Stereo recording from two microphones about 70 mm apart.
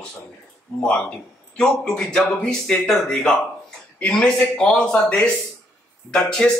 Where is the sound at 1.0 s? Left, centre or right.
Centre.